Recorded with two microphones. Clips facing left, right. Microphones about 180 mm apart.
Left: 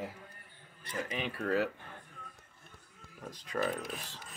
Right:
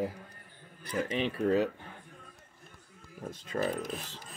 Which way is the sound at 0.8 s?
30° right (ahead or behind).